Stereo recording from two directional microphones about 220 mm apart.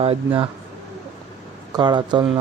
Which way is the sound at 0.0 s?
25° right (ahead or behind).